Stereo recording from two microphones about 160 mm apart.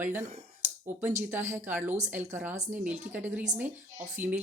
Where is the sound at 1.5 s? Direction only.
15° right (ahead or behind).